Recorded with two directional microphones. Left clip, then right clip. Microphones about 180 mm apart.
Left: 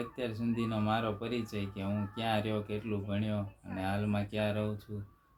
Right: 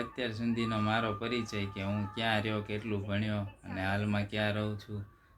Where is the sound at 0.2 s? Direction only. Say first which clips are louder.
Right 1 dB; centre (ahead or behind).